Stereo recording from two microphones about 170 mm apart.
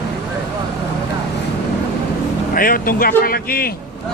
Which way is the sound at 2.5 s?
60° left (ahead or behind).